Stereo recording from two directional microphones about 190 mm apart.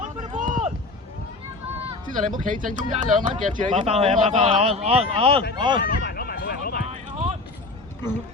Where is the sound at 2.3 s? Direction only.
45° right (ahead or behind).